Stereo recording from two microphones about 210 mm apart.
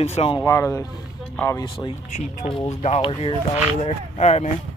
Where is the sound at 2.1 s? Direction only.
30° left (ahead or behind).